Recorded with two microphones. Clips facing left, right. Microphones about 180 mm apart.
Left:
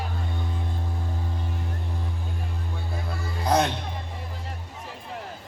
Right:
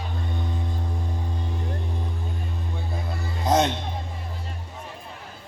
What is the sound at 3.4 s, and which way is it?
Music, 25° right (ahead or behind).